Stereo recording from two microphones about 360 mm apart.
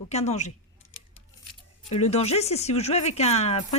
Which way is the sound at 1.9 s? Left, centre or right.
Centre.